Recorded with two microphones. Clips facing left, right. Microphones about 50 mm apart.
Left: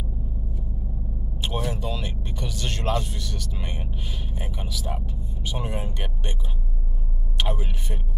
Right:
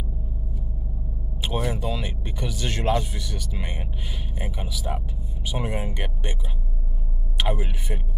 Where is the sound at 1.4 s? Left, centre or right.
Centre.